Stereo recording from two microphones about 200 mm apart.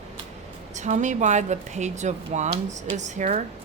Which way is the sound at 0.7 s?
35° right (ahead or behind).